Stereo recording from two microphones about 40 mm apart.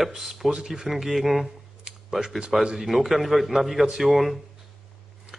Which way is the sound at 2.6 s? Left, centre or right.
Centre.